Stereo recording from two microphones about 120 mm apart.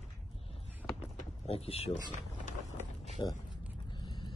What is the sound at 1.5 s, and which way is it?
Speech, 55° left (ahead or behind).